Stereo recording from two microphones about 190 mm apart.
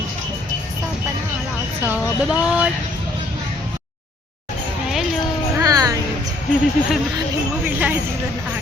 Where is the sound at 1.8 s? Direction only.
5° right (ahead or behind).